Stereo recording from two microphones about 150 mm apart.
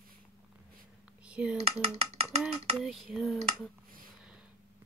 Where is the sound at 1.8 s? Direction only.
45° right (ahead or behind).